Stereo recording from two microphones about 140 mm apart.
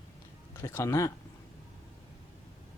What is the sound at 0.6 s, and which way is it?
Speech, 20° left (ahead or behind).